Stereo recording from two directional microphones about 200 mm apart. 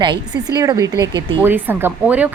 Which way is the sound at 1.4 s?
10° right (ahead or behind).